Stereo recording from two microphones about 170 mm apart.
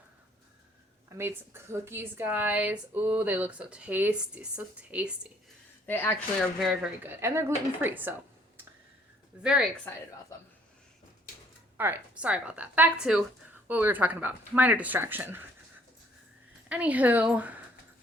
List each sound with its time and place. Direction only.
1.2 s speech: 15° right (ahead or behind)
5.8 s speech: 10° left (ahead or behind)
7.0 s speech: 15° right (ahead or behind)
9.4 s speech: 5° right (ahead or behind)
11.8 s speech: 10° right (ahead or behind)
16.6 s speech: 10° right (ahead or behind)